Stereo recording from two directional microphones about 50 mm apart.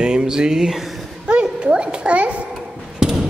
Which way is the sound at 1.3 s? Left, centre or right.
Right.